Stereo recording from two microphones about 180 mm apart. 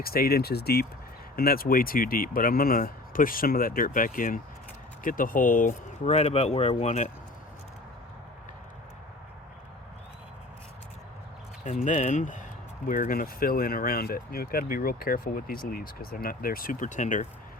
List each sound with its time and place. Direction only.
0.0 s speech: 55° left (ahead or behind); by 7.1 s 40° left (ahead or behind)
11.6 s speech: 45° left (ahead or behind)